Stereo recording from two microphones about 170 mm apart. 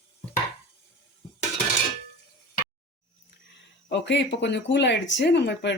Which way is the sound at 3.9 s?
90° left.